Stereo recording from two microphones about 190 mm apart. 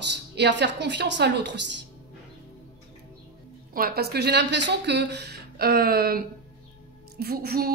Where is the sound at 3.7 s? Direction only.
55° right (ahead or behind).